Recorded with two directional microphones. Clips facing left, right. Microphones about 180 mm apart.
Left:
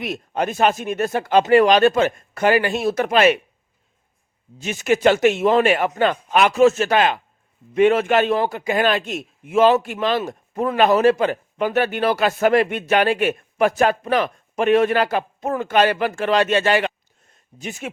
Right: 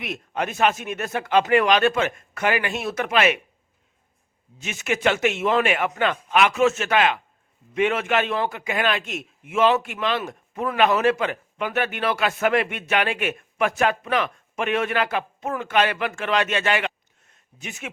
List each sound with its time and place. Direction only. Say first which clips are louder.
0.0 s a man's voice: left 4 dB; 35° left (ahead or behind)
4.5 s a man's voice: left 7 dB; 35° left (ahead or behind)